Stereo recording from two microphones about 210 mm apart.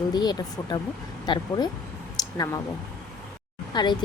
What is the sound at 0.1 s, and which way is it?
Speech, 20° left (ahead or behind).